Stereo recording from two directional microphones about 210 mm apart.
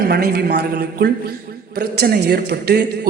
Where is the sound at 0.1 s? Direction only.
50° right (ahead or behind).